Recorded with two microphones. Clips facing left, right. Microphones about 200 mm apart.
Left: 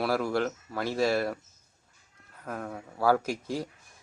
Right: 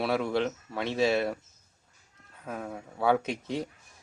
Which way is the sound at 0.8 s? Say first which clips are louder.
Right 1 dB; 25° right (ahead or behind).